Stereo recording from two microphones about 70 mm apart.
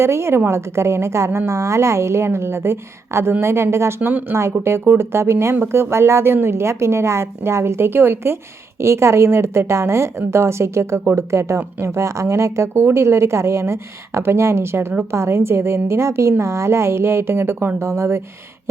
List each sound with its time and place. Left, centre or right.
0.0 s a woman's voice: right